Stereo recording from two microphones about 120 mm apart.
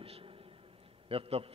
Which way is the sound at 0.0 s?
50° right (ahead or behind).